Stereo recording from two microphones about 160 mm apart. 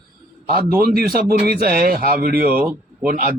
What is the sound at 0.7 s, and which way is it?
A man's voice, 70° right (ahead or behind).